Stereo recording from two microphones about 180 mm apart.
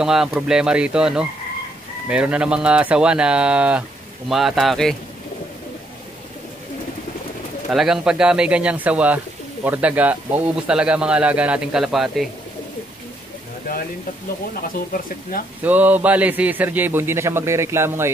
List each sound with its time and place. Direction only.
0.0 s a man's voice: 5° right (ahead or behind)
7.7 s speech: 5° right (ahead or behind)
15.6 s a man's voice: 10° right (ahead or behind)